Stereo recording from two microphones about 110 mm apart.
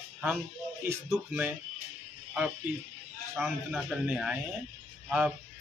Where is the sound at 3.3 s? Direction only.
5° right (ahead or behind).